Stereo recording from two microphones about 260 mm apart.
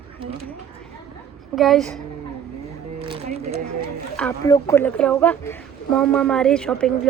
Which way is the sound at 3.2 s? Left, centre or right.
Right.